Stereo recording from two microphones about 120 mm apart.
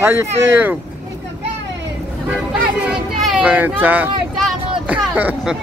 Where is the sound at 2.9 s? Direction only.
5° right (ahead or behind).